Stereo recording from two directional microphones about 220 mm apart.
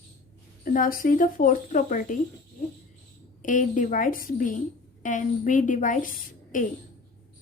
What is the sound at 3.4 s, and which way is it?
A woman's voice, 35° left (ahead or behind).